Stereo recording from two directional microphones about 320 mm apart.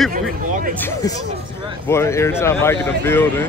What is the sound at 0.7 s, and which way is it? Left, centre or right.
Speech, centre.